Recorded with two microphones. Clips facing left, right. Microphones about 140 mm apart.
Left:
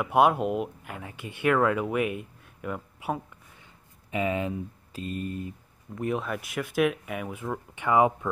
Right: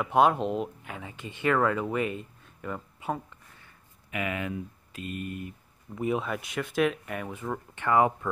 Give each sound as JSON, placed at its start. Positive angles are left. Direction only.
{"t": 0.0, "sound": "speech", "side_deg": 10}
{"t": 4.1, "sound": "speech", "side_deg": 30}
{"t": 5.9, "sound": "speech", "side_deg": 0}